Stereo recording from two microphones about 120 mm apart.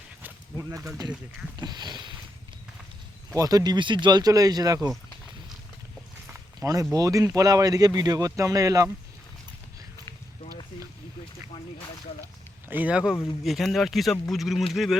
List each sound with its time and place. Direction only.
0.5 s speech: 25° right (ahead or behind)
3.3 s speech: 30° right (ahead or behind)
6.6 s speech: 30° right (ahead or behind)
12.6 s a man's voice: 15° right (ahead or behind)